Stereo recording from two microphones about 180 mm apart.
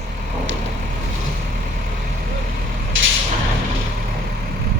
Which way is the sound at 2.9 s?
90° right.